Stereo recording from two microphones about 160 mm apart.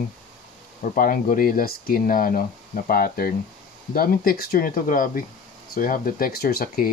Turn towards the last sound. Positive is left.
turn(degrees=70)  # may be behind; listen again after turning